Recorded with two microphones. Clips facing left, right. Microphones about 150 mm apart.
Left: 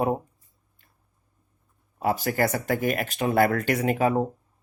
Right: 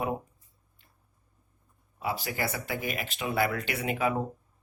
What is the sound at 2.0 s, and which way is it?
Speech, 45° left (ahead or behind).